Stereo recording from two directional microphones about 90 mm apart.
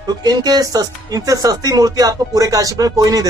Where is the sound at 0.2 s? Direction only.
50° right (ahead or behind).